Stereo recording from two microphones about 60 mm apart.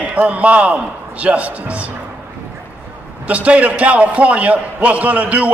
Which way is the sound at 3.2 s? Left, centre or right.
Right.